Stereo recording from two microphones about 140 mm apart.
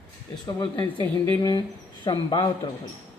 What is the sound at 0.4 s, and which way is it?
Speech, 30° left (ahead or behind).